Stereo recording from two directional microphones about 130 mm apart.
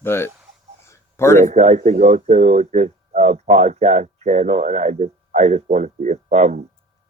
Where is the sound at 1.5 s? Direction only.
60° right (ahead or behind).